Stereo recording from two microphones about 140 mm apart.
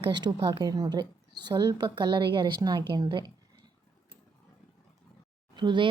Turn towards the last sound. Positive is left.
turn(degrees=-35)  # may be behind; listen again after turning